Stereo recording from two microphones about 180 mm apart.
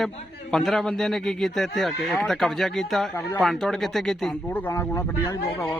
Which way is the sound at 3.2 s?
15° left (ahead or behind).